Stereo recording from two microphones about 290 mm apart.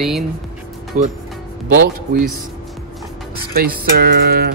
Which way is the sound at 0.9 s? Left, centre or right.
Right.